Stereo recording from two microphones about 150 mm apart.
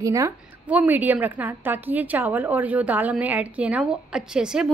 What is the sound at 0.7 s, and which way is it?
A woman's voice, 10° right (ahead or behind).